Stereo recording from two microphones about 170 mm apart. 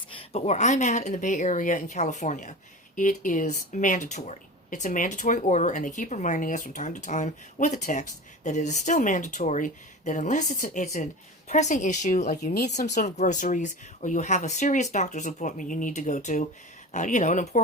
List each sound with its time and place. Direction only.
0.2 s speech: 40° left (ahead or behind)